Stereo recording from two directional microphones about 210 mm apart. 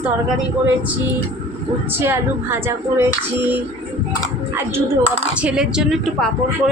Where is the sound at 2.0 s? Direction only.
10° right (ahead or behind).